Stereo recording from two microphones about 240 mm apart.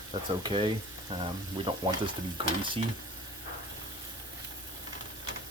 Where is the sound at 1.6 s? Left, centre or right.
Centre.